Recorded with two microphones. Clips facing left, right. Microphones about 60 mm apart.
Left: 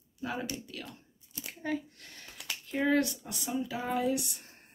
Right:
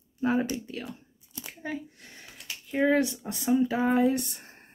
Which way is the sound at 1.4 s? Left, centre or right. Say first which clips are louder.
Left 1 dB; centre.